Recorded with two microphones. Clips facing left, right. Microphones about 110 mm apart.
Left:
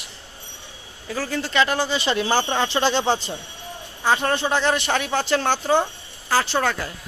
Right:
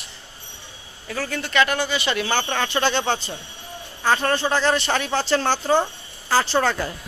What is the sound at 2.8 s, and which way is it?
Speech, 30° left (ahead or behind).